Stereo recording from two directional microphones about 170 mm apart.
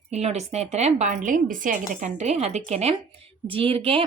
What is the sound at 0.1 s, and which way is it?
Speech, 40° right (ahead or behind).